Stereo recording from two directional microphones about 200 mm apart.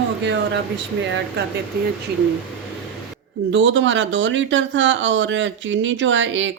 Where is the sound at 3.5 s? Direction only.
65° right (ahead or behind).